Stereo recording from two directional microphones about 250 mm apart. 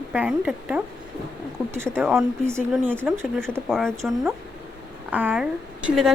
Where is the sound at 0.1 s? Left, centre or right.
Centre.